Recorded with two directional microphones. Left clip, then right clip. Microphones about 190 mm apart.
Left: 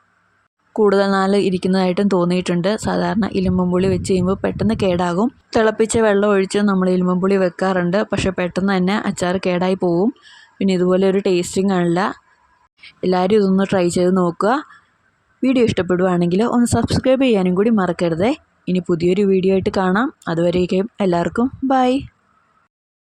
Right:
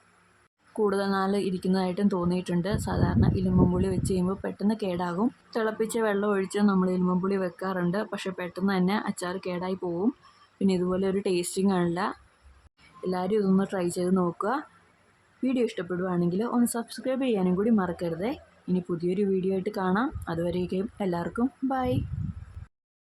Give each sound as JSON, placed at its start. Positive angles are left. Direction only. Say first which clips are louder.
{"t": 0.8, "sound": "speech", "louder": "left 11 dB", "side_deg": 35}